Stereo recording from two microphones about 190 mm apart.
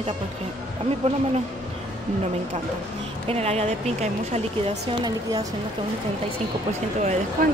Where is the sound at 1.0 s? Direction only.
35° right (ahead or behind).